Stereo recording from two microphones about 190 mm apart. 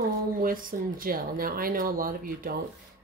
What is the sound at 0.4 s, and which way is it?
A woman's voice, 45° right (ahead or behind).